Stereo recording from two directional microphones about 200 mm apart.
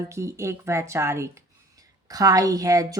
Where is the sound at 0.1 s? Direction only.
15° right (ahead or behind).